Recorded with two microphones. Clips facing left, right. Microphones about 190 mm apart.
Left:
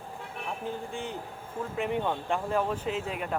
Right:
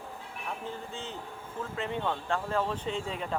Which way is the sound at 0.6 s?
15° left (ahead or behind).